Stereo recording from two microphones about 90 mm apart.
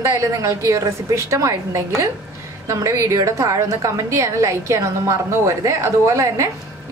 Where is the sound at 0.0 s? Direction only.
35° right (ahead or behind).